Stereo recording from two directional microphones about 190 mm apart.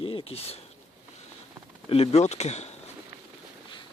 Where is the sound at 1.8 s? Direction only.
30° left (ahead or behind).